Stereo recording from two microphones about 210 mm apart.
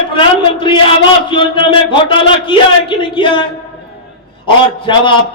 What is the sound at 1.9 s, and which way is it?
A man's voice, 25° left (ahead or behind).